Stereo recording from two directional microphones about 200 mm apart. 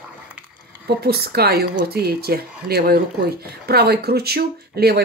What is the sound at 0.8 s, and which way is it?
Speech, 50° right (ahead or behind).